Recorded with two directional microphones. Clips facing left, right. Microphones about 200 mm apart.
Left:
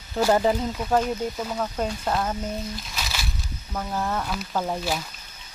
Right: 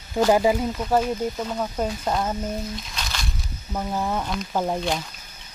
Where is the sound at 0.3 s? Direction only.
10° right (ahead or behind).